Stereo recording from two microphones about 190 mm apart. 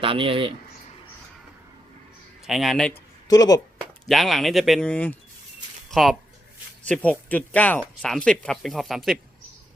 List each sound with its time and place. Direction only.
0.0 s speech: 25° right (ahead or behind)
2.4 s a man's voice: centre (ahead or behind)
3.2 s speech: 20° left (ahead or behind)
4.1 s speech: centre (ahead or behind)